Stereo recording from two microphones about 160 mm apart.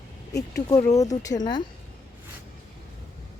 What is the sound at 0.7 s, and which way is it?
Speech, 20° left (ahead or behind).